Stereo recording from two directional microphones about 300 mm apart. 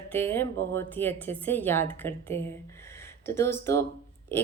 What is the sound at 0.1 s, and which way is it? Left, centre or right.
A woman's voice, centre.